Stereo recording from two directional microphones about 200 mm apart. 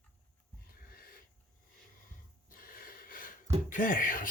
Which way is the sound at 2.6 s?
45° left (ahead or behind).